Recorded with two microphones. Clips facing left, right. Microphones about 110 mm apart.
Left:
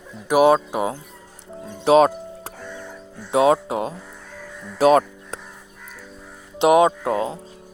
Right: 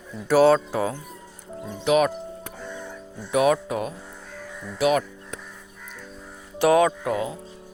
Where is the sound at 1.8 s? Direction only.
30° left (ahead or behind).